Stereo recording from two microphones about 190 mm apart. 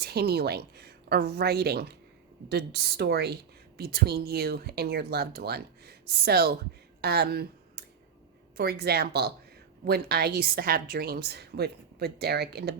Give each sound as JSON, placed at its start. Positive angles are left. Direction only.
{"t": 0.0, "sound": "a woman's voice", "side_deg": -55}